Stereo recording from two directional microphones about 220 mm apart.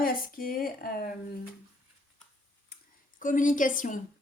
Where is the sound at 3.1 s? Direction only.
35° left (ahead or behind).